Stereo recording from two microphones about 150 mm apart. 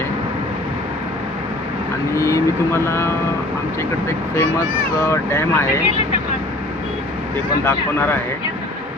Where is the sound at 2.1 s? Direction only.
20° left (ahead or behind).